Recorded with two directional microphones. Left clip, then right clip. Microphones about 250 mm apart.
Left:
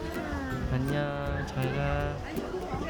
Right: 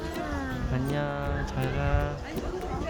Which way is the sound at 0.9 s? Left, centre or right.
Centre.